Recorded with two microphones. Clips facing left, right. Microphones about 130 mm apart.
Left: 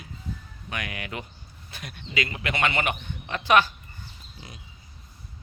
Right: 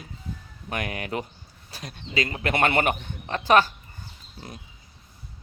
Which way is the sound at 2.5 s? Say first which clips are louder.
Right 4 dB; 50° right (ahead or behind).